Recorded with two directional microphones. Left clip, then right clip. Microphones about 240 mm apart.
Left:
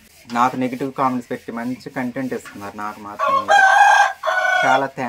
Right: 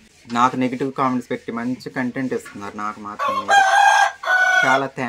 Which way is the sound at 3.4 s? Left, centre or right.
Centre.